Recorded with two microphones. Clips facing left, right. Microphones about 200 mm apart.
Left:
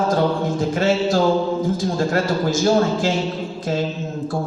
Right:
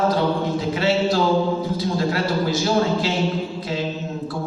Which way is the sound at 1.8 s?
45° left (ahead or behind).